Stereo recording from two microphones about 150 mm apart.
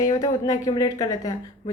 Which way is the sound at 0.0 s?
25° left (ahead or behind).